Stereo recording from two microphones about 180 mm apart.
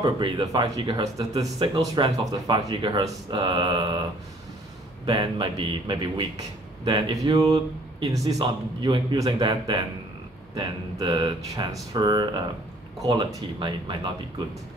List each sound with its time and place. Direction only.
0.0 s a man's voice: 25° right (ahead or behind)
5.0 s a man's voice: 25° right (ahead or behind)